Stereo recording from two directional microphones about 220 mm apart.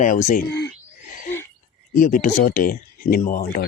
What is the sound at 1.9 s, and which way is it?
A man's voice, 40° left (ahead or behind).